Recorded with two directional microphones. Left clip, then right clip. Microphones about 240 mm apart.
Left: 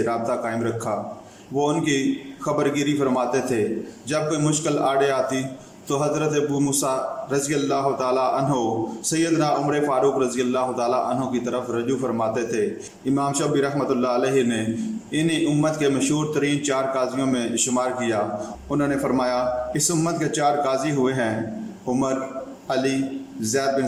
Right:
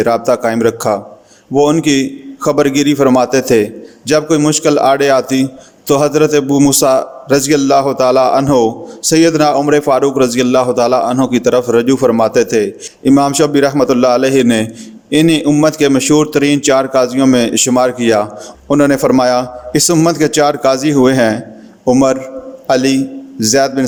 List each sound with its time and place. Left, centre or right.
0.0 s a man's voice: right